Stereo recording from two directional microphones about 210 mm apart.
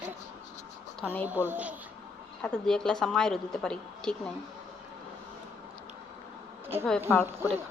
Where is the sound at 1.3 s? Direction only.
10° right (ahead or behind).